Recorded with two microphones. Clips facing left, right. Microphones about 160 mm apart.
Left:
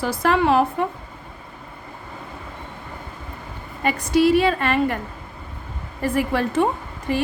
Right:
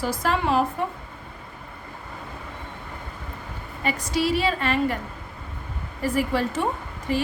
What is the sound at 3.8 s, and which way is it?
Speech, 55° left (ahead or behind).